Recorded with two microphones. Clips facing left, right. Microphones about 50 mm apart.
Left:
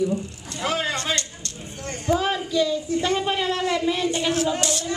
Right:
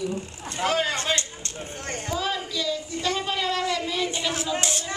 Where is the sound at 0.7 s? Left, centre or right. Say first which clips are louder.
Even; centre.